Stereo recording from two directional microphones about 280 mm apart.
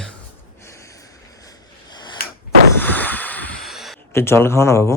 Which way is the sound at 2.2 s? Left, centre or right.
Left.